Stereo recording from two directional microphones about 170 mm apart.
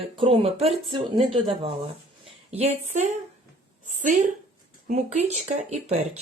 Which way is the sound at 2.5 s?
40° right (ahead or behind).